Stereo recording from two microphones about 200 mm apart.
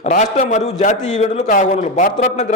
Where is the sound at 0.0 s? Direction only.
35° left (ahead or behind).